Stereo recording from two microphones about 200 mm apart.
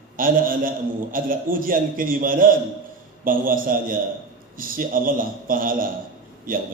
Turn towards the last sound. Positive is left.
turn(degrees=-45)  # may be behind; listen again after turning